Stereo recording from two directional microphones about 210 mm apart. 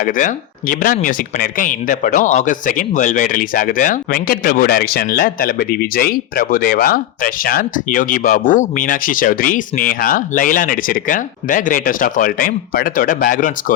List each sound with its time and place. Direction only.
0.0 s speech: 40° left (ahead or behind)